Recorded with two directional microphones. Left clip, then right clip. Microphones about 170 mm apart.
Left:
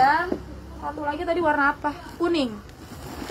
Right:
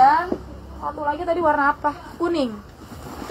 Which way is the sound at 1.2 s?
30° left (ahead or behind).